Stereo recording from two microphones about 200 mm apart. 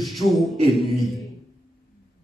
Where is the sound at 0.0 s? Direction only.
Centre (ahead or behind).